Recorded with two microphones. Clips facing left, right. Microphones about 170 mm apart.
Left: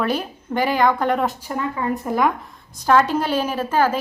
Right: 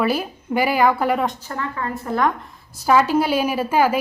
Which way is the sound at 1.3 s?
10° left (ahead or behind).